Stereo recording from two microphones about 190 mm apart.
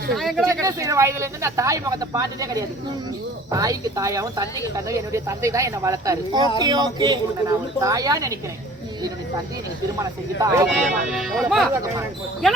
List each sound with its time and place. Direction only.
0.2 s speech: centre (ahead or behind)
0.4 s a woman's voice: 15° right (ahead or behind)
10.0 s speech: 15° right (ahead or behind)
10.7 s speech: centre (ahead or behind)
11.7 s speech: 15° right (ahead or behind)